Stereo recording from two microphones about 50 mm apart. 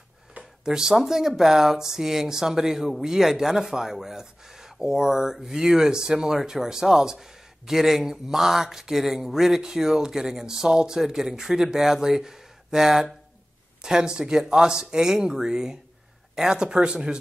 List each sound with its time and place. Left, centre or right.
0.7 s speech: centre